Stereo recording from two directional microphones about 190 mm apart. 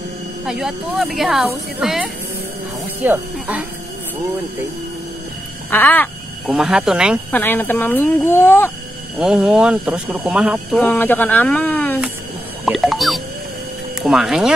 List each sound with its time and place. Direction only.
0.5 s speech: centre (ahead or behind)
5.7 s speech: 10° left (ahead or behind)
6.4 s speech: centre (ahead or behind)
7.2 s speech: 10° left (ahead or behind)
9.2 s speech: 5° right (ahead or behind)
10.8 s speech: 10° left (ahead or behind)